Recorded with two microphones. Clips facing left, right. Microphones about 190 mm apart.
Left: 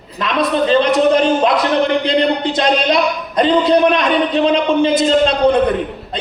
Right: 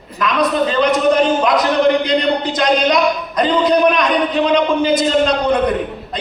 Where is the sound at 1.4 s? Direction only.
30° left (ahead or behind).